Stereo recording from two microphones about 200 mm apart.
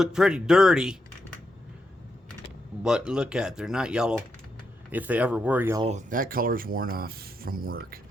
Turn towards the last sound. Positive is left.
turn(degrees=-45)  # may be behind; listen again after turning